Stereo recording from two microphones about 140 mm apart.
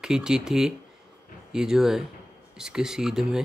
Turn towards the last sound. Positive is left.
turn(degrees=-5)  # may be behind; listen again after turning